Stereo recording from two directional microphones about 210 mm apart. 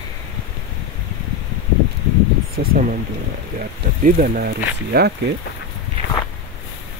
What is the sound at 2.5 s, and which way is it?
Speech, 40° right (ahead or behind).